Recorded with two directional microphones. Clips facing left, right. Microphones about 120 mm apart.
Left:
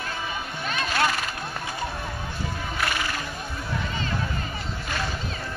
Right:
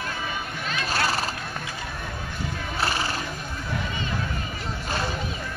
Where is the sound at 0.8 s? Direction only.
35° right (ahead or behind).